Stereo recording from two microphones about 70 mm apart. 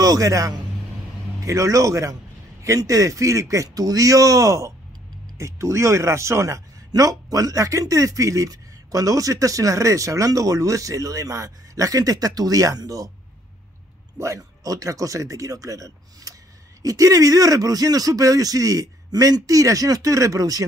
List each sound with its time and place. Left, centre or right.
0.0 s speech: right
6.9 s speech: right
14.1 s speech: right